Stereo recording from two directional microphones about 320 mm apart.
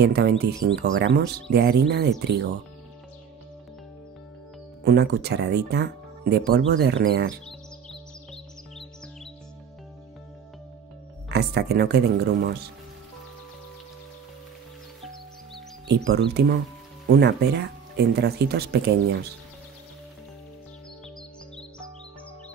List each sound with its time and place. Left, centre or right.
0.0 s speech: right
4.8 s speech: right
7.4 s music: centre
11.2 s speech: right
16.0 s speech: right